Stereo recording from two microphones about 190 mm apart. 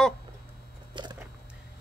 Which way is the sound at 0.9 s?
25° right (ahead or behind).